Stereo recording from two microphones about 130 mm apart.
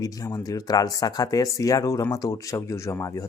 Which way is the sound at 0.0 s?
25° left (ahead or behind).